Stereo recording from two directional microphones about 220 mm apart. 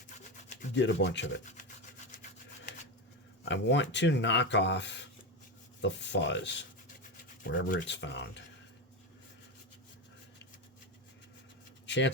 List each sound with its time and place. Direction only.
0.8 s rub: 55° left (ahead or behind)
3.4 s speech: 55° left (ahead or behind)
7.4 s rub: 50° left (ahead or behind)
7.9 s speech: 55° left (ahead or behind)
11.9 s speech: 55° left (ahead or behind)